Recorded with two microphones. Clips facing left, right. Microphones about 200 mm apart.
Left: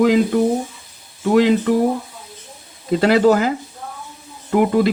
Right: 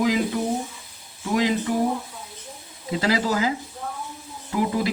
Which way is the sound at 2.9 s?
60° left (ahead or behind).